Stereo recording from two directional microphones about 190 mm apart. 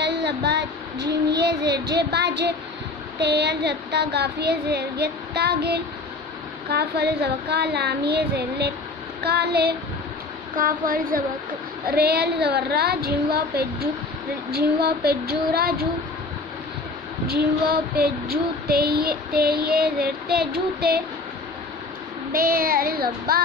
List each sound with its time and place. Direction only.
0.0 s a sound: 65° right (ahead or behind)
1.3 s speech: 60° right (ahead or behind)
10.5 s speech: 45° right (ahead or behind)
10.9 s child singing: 45° right (ahead or behind)
11.8 s speech: 55° right (ahead or behind)
17.3 s speech: 55° right (ahead or behind)
19.3 s child singing: 50° right (ahead or behind)
22.3 s child singing: 50° right (ahead or behind)